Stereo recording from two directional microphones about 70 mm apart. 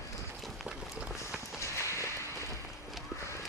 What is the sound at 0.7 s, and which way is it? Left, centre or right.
Run, centre.